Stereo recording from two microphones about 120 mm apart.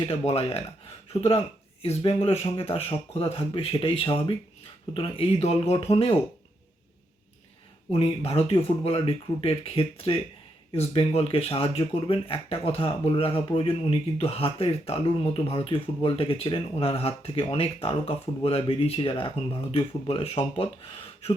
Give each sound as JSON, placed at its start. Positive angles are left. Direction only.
{"t": 0.0, "sound": "speech", "side_deg": 60}
{"t": 7.9, "sound": "speech", "side_deg": 60}